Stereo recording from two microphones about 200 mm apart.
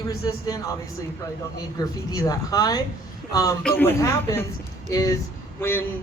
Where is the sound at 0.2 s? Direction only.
20° left (ahead or behind).